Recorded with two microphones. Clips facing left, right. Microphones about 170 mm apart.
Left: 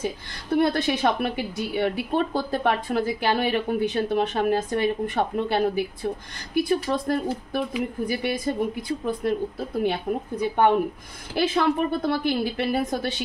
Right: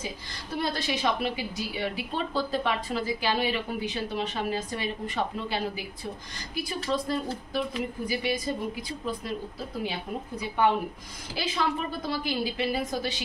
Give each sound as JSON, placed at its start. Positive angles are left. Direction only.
{"t": 0.0, "sound": "a woman's voice", "side_deg": 55}
{"t": 10.5, "sound": "a woman's voice", "side_deg": 55}